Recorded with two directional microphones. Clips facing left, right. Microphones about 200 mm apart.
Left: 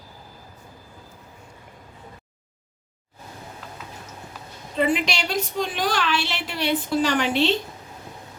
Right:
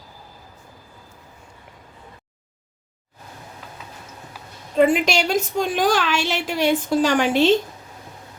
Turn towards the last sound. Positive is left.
turn(degrees=-45)  # may be behind; listen again after turning